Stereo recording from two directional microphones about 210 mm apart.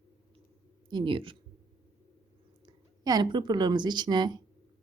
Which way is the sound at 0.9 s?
25° right (ahead or behind).